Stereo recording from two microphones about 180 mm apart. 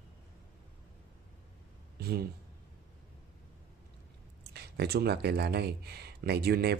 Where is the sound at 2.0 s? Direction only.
60° right (ahead or behind).